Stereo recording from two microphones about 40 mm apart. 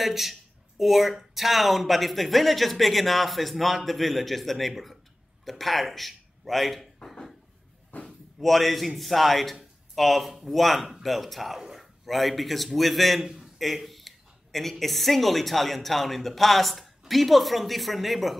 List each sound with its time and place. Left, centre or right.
0.0 s a man's voice: centre
7.9 s a sound: left
8.4 s speech: centre